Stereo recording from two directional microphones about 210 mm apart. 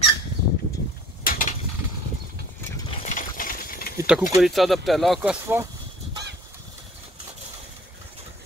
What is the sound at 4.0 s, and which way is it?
Vehicle, 5° right (ahead or behind).